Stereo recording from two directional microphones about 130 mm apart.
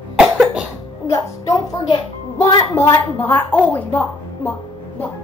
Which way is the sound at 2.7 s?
15° left (ahead or behind).